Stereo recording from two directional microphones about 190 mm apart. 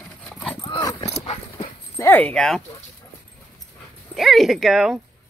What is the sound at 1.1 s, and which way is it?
Dog, 30° left (ahead or behind).